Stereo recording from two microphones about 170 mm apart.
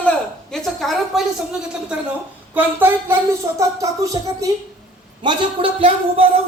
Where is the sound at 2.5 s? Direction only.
10° right (ahead or behind).